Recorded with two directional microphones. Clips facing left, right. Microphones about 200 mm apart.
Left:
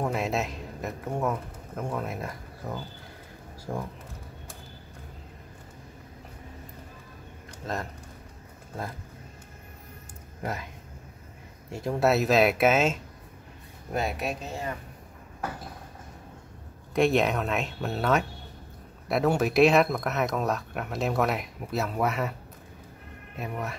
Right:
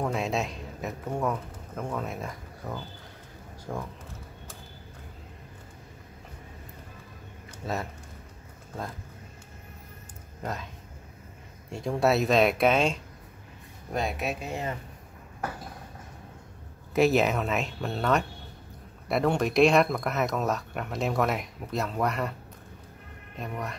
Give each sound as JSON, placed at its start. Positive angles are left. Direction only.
{"t": 0.0, "sound": "speech", "side_deg": 5}
{"t": 7.6, "sound": "speech", "side_deg": -5}
{"t": 10.4, "sound": "speech", "side_deg": 10}
{"t": 11.7, "sound": "speech", "side_deg": 5}
{"t": 14.5, "sound": "a man's voice", "side_deg": -20}
{"t": 16.9, "sound": "speech", "side_deg": -5}
{"t": 23.3, "sound": "speech", "side_deg": 5}